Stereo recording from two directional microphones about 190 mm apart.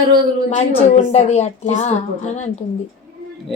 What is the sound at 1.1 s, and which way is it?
Speech, 35° left (ahead or behind).